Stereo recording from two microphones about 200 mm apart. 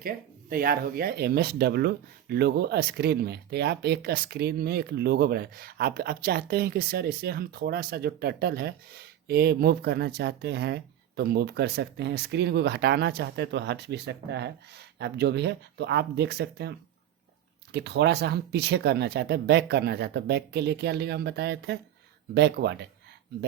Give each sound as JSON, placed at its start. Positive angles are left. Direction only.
{"t": 0.5, "sound": "speech", "side_deg": -45}